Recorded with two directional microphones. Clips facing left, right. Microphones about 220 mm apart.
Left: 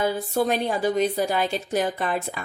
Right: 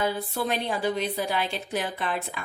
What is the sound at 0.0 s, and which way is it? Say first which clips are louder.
Speech: left 5 dB; 45° left (ahead or behind).